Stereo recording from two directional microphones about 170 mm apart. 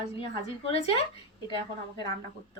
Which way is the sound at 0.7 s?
35° left (ahead or behind).